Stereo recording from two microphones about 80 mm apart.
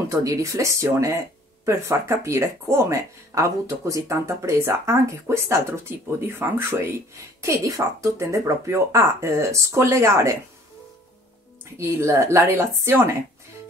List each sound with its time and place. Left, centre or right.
0.1 s speech: right
11.7 s speech: right